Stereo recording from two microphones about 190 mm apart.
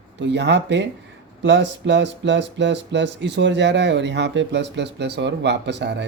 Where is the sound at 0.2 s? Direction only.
65° right (ahead or behind).